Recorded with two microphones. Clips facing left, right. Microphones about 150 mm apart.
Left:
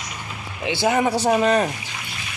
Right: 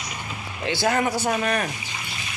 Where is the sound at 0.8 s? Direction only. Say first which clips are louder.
Left 3 dB; 15° left (ahead or behind).